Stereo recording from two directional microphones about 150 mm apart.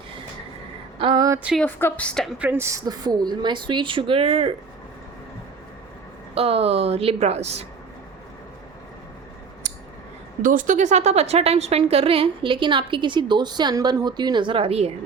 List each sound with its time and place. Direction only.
0.9 s a sound: 30° right (ahead or behind)
1.5 s a woman's voice: 10° left (ahead or behind)
2.4 s a woman's voice: 15° right (ahead or behind); by 4.5 s 40° right (ahead or behind)
6.3 s a woman's voice: 40° right (ahead or behind)
10.4 s a woman's voice: 60° right (ahead or behind); by 14.9 s 45° right (ahead or behind)